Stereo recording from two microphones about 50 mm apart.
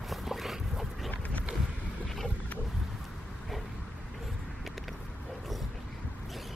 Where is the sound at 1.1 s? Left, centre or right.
Left.